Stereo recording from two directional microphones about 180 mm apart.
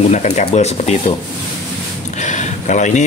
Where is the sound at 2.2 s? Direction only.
40° left (ahead or behind).